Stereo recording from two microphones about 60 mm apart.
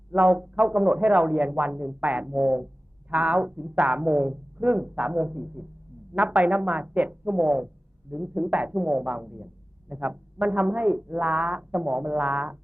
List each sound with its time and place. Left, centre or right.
0.1 s speech: right